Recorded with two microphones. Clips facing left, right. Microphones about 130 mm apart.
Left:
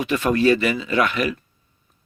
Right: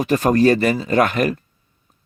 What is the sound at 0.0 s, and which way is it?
Speech, 40° right (ahead or behind).